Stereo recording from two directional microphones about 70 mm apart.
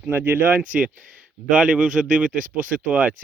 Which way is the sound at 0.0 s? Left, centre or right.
Right.